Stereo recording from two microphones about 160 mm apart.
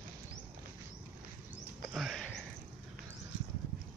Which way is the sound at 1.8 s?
Centre (ahead or behind).